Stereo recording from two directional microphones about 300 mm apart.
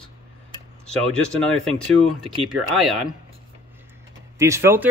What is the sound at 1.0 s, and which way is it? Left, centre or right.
Speech, centre.